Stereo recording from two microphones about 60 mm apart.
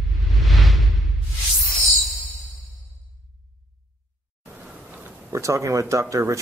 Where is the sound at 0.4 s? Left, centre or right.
Centre.